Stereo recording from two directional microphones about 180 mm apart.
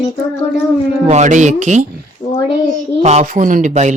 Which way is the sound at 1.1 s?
40° right (ahead or behind).